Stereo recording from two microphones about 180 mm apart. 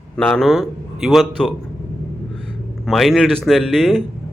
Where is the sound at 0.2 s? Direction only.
5° left (ahead or behind).